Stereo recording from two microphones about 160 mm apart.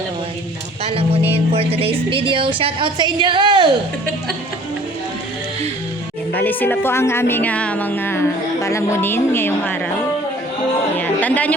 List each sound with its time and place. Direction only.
0.9 s a woman's voice: 35° right (ahead or behind)
6.3 s speech: 10° left (ahead or behind)
10.9 s speech: 10° left (ahead or behind)